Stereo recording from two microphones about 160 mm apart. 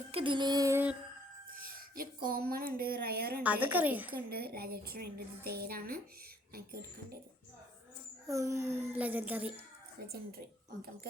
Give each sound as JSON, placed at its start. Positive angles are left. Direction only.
{"t": 0.1, "sound": "music", "side_deg": -30}
{"t": 2.0, "sound": "a woman's voice", "side_deg": -65}
{"t": 3.4, "sound": "a woman's voice", "side_deg": -10}
{"t": 4.3, "sound": "a woman's voice", "side_deg": -75}
{"t": 8.3, "sound": "a woman's voice", "side_deg": -20}